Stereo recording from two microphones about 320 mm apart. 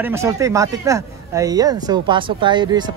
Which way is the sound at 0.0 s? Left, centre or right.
Centre.